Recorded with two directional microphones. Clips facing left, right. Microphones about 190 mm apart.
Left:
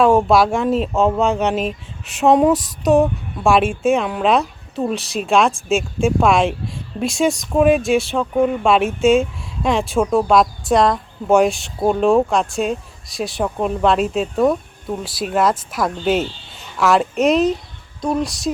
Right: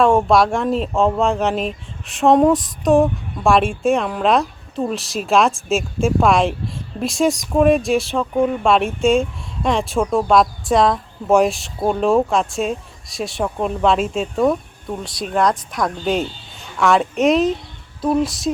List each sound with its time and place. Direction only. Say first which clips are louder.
0.0 s speech: left 1 dB; centre (ahead or behind)